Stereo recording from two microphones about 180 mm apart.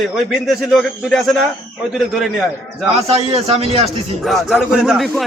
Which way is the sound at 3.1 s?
35° right (ahead or behind).